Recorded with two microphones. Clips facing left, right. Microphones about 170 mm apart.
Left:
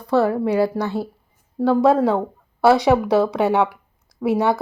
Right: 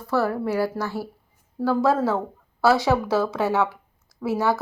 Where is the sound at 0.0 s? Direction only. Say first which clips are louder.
Left 5 dB; 20° left (ahead or behind).